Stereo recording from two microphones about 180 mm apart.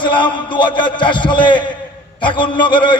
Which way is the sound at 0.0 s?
25° left (ahead or behind).